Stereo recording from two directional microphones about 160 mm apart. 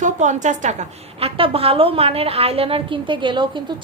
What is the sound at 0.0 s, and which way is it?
A woman's voice, 50° right (ahead or behind).